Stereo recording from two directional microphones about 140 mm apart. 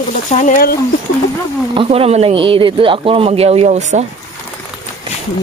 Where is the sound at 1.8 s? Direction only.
45° right (ahead or behind).